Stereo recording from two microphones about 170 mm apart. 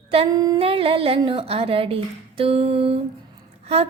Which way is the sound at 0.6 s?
35° right (ahead or behind).